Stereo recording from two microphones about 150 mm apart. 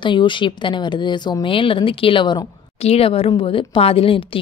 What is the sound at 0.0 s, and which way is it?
A woman's voice, 30° left (ahead or behind).